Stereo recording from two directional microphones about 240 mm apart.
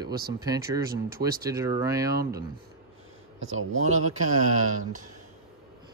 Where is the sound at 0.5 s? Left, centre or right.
Centre.